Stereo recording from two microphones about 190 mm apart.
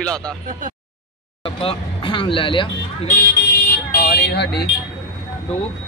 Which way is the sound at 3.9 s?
55° left (ahead or behind).